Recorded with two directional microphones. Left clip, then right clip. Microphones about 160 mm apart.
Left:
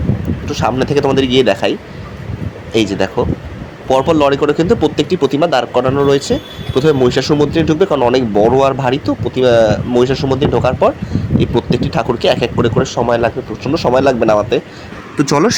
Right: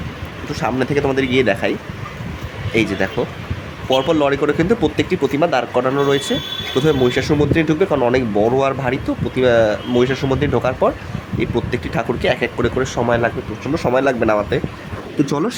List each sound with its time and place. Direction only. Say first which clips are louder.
0.5 s speech: left 5 dB; 15° left (ahead or behind)
2.7 s speech: left 4 dB; 10° left (ahead or behind)
15.2 s speech: left 7 dB; 35° left (ahead or behind)